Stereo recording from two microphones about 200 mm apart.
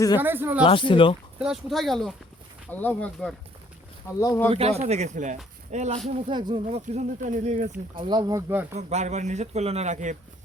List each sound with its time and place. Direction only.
0.2 s speech: 10° right (ahead or behind)
0.6 s speech: 25° left (ahead or behind)
1.4 s speech: centre (ahead or behind); by 4.4 s 15° left (ahead or behind)
4.4 s speech: 30° right (ahead or behind)
8.0 s speech: 20° right (ahead or behind)
8.9 s speech: 35° right (ahead or behind)